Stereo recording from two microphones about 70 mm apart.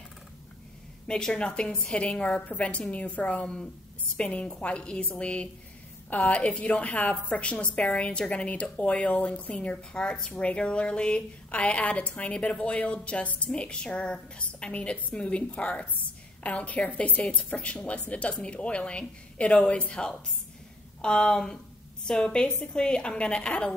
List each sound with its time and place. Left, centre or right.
1.0 s a woman's voice: centre